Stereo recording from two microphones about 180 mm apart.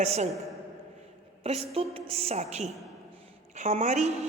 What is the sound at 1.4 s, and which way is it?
A woman's voice, 35° right (ahead or behind).